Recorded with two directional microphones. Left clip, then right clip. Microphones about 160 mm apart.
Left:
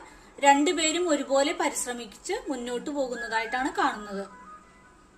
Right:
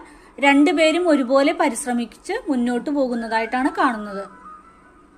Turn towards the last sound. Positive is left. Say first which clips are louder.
# right 7 dB
turn(degrees=-45)  # may be behind; listen again after turning